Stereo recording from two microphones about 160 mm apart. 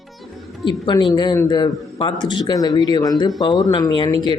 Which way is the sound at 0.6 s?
30° left (ahead or behind).